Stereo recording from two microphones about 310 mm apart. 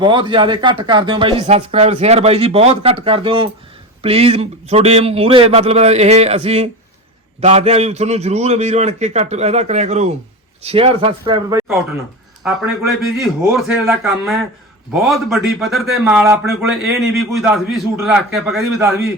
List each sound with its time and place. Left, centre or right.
0.0 s a man's voice: centre
12.4 s speech: centre